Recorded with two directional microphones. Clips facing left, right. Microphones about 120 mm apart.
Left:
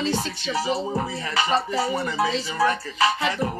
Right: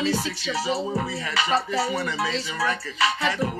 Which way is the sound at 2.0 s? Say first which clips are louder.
Left 3 dB; 40° left (ahead or behind).